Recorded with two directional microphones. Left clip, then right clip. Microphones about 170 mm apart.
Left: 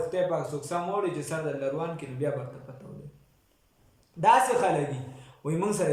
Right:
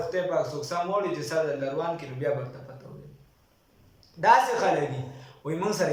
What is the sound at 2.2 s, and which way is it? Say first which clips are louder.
Speech: right 2 dB; 15° left (ahead or behind).